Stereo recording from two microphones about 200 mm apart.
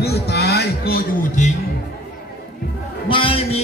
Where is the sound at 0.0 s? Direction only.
55° left (ahead or behind).